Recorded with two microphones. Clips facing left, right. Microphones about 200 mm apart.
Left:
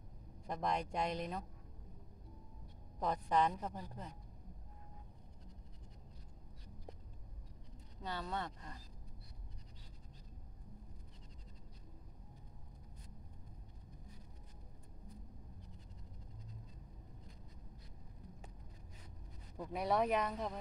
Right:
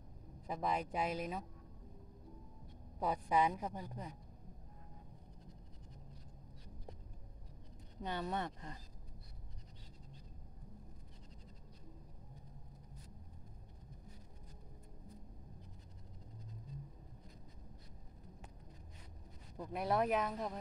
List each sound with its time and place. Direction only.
0.5 s speech: 5° right (ahead or behind)
3.0 s a woman's voice: 10° right (ahead or behind)
8.0 s speech: 20° right (ahead or behind)
19.6 s speech: centre (ahead or behind)